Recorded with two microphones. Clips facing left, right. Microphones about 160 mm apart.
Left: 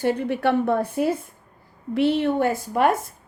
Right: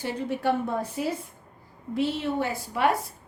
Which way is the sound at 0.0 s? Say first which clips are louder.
Left 6 dB; 60° left (ahead or behind).